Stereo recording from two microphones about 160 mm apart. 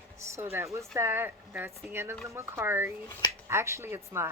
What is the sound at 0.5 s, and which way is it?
Speech, 20° right (ahead or behind).